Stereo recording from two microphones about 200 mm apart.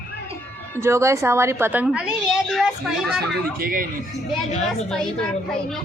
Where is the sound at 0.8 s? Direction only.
15° right (ahead or behind).